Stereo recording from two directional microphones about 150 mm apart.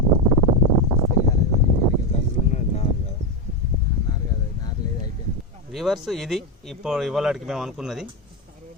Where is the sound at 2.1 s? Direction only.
40° left (ahead or behind).